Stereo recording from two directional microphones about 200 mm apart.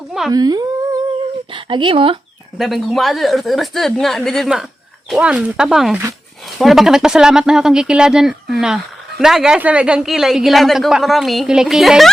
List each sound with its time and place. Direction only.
0.3 s speech: 20° right (ahead or behind)
2.6 s speech: centre (ahead or behind)